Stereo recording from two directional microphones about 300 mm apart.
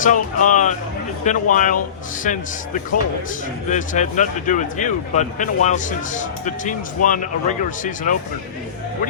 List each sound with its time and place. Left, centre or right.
0.0 s speech: left